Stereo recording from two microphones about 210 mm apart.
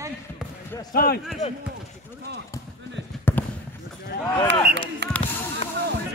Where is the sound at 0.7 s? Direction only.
20° left (ahead or behind).